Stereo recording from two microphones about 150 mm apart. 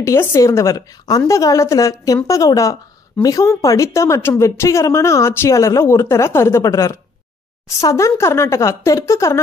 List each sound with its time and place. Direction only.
0.0 s a woman's voice: 20° left (ahead or behind)